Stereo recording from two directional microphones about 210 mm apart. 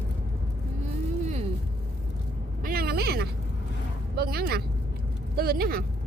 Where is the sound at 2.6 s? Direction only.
45° right (ahead or behind).